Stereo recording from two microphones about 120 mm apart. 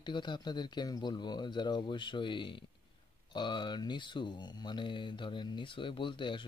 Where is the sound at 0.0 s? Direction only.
40° left (ahead or behind).